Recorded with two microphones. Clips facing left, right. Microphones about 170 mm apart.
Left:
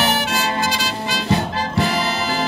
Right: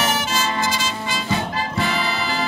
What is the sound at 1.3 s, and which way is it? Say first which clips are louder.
Music: left 3 dB; centre (ahead or behind).